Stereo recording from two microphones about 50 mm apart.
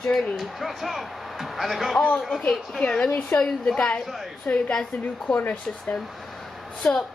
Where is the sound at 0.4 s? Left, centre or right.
Centre.